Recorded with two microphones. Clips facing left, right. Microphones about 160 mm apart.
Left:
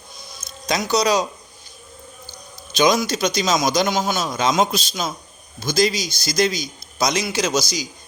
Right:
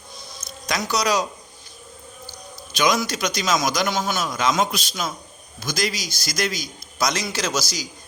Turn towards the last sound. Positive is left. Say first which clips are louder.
# left 4 dB
turn(degrees=20)  # may be behind; listen again after turning